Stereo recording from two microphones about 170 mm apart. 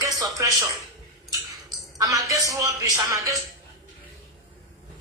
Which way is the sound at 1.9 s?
20° right (ahead or behind).